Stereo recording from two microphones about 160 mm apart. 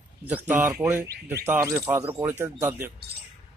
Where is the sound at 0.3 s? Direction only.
10° right (ahead or behind).